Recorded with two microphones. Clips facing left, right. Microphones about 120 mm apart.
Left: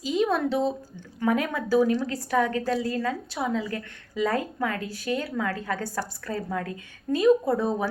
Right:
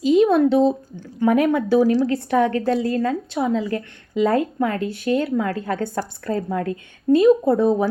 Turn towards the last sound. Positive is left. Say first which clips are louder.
# right 7 dB
turn(degrees=-25)  # may be behind; listen again after turning